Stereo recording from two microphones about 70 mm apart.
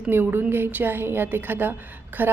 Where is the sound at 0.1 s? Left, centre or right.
Right.